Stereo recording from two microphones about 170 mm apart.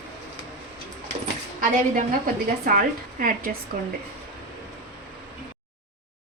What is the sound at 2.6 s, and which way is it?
Speech, 55° right (ahead or behind).